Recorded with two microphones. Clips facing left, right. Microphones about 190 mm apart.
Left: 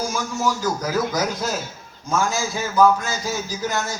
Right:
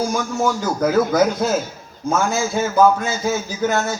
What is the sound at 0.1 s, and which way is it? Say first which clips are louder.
A man's voice: right 4 dB; 60° right (ahead or behind).